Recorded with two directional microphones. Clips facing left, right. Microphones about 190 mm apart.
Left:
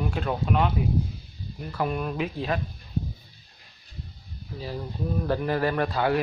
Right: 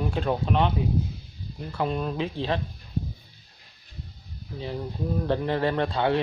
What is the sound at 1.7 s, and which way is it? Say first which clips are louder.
Speech: even; 25° right (ahead or behind).